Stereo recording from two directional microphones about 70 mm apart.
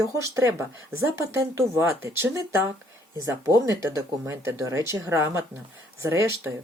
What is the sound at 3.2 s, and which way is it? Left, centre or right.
Speech, right.